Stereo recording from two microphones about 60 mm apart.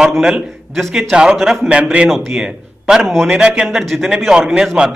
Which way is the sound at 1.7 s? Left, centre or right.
Centre.